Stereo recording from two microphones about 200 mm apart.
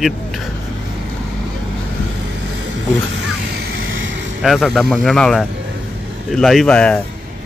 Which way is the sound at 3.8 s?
75° right (ahead or behind).